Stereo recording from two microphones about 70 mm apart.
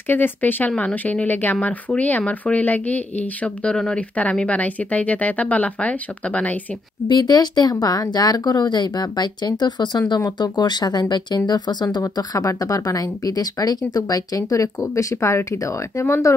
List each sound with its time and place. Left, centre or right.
0.1 s speech: left
3.7 s speech: centre
4.2 s speech: centre
7.1 s speech: left